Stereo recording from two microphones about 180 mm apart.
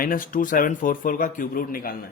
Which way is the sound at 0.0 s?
50° left (ahead or behind).